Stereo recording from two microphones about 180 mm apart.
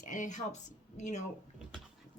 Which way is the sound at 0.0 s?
45° left (ahead or behind).